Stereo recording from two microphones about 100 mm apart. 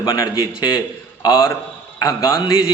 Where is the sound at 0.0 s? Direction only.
45° left (ahead or behind).